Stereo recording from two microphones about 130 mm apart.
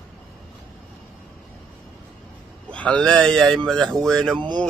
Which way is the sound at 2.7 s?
10° left (ahead or behind).